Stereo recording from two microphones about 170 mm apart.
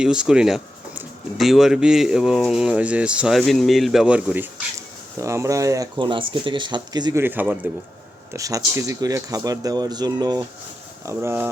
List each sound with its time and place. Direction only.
0.0 s speech: 5° right (ahead or behind); by 7.2 s 25° right (ahead or behind)
7.2 s a man's voice: 10° right (ahead or behind)